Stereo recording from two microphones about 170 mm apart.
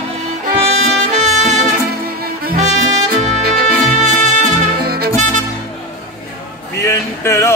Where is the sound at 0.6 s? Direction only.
40° right (ahead or behind).